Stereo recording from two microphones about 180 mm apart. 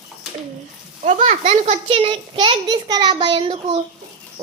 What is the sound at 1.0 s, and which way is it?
A child's voice, 40° right (ahead or behind).